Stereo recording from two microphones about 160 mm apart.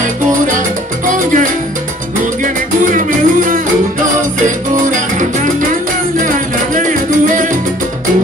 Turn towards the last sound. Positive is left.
turn(degrees=-55)  # may be behind; listen again after turning